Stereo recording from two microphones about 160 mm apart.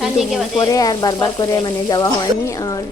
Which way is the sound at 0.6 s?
25° left (ahead or behind).